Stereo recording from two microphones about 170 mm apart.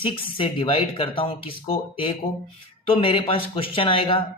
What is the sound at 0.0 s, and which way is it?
A man's voice, 30° left (ahead or behind).